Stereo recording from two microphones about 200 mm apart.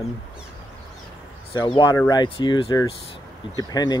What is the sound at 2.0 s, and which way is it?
Speech, 20° left (ahead or behind).